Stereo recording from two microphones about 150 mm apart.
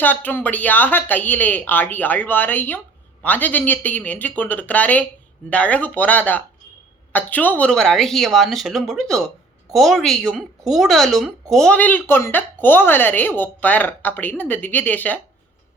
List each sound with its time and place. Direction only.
0.0 s a woman's voice: 10° left (ahead or behind)